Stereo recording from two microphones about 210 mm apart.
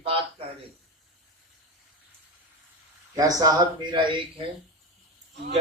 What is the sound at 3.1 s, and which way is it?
Speech, 15° right (ahead or behind).